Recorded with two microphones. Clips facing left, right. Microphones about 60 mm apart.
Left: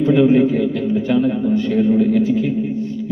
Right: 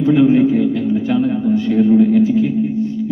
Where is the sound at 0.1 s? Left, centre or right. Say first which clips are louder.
Right 2 dB; centre.